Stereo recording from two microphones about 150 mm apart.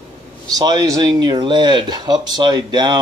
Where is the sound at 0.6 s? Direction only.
25° right (ahead or behind).